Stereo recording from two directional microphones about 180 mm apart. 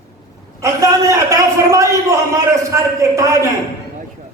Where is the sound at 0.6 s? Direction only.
15° right (ahead or behind).